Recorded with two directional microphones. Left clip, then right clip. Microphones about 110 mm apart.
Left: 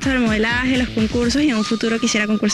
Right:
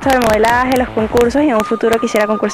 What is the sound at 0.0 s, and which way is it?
Speech, 25° left (ahead or behind).